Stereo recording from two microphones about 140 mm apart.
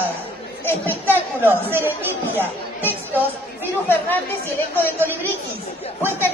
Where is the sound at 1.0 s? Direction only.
15° right (ahead or behind).